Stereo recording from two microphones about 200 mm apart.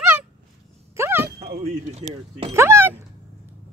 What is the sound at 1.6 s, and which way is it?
Speech, 35° right (ahead or behind).